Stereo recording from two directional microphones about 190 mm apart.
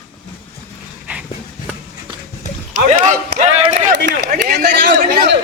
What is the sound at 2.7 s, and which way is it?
Speech, 40° right (ahead or behind).